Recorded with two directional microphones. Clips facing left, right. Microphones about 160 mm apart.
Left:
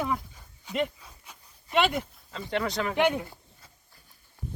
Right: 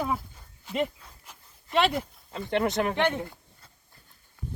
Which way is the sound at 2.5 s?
20° right (ahead or behind).